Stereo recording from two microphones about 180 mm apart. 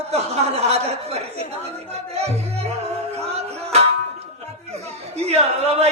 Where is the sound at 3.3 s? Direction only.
35° right (ahead or behind).